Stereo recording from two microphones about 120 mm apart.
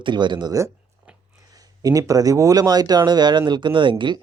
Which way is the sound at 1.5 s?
30° right (ahead or behind).